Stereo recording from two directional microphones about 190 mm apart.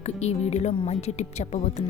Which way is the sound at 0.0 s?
35° left (ahead or behind).